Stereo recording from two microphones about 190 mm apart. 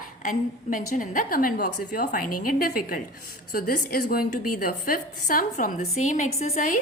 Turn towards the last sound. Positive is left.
turn(degrees=45)  # may be behind; listen again after turning